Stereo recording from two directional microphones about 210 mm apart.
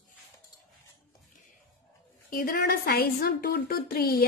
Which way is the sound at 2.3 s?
45° left (ahead or behind).